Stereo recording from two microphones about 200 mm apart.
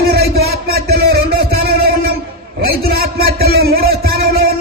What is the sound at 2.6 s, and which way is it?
Speech, 50° right (ahead or behind).